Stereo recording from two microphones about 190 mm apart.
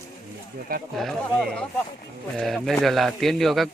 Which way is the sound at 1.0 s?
Centre (ahead or behind).